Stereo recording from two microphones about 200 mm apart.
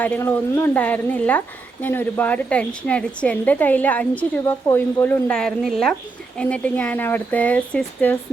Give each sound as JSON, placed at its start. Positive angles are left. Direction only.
{"t": 0.0, "sound": "a woman's voice", "side_deg": 10}